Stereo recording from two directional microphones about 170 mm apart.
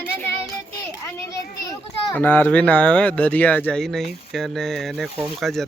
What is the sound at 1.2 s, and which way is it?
Children playing, 20° left (ahead or behind).